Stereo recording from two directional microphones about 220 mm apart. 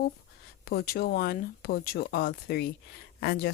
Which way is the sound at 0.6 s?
45° left (ahead or behind).